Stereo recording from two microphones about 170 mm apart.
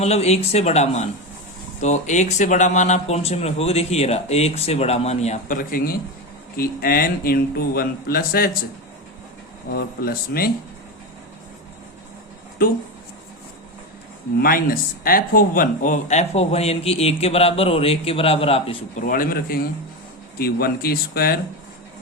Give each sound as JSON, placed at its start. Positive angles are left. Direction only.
{"t": 0.0, "sound": "speech", "side_deg": 40}
{"t": 9.6, "sound": "speech", "side_deg": 60}
{"t": 14.3, "sound": "speech", "side_deg": 60}
{"t": 19.0, "sound": "speech", "side_deg": 55}